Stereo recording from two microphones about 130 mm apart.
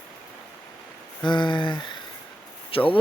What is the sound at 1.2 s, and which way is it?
Speech, 35° left (ahead or behind).